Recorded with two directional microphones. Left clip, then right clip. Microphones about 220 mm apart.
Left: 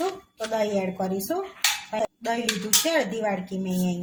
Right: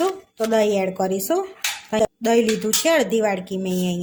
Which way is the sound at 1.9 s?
45° right (ahead or behind).